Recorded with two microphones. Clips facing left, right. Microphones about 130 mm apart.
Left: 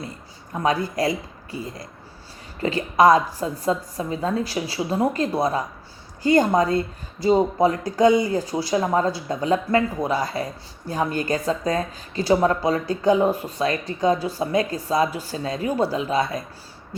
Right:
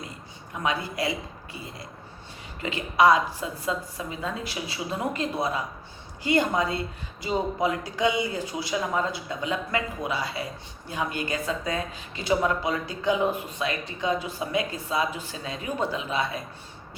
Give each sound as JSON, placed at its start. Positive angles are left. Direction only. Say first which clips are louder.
{"t": 0.5, "sound": "speech", "louder": "left 6 dB", "side_deg": 40}